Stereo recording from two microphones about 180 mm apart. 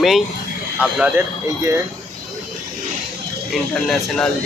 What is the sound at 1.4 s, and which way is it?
Speech, 15° right (ahead or behind).